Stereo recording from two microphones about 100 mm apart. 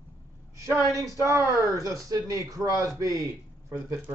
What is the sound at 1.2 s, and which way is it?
A man's voice, 30° right (ahead or behind).